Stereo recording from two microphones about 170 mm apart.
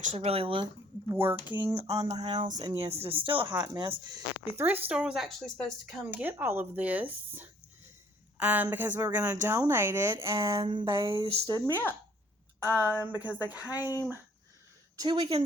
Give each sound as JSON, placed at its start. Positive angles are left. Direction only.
{"t": 0.2, "sound": "speech", "side_deg": -35}
{"t": 1.1, "sound": "speech", "side_deg": -15}
{"t": 4.1, "sound": "speech", "side_deg": -15}
{"t": 10.6, "sound": "speech", "side_deg": -30}
{"t": 11.6, "sound": "speech", "side_deg": -10}
{"t": 13.7, "sound": "speech", "side_deg": 20}
{"t": 14.9, "sound": "speech", "side_deg": -25}